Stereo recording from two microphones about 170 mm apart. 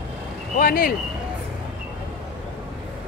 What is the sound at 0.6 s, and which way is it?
Speech, 60° left (ahead or behind).